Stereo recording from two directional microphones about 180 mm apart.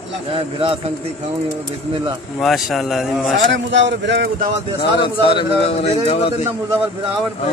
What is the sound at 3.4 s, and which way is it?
Speech, 85° right.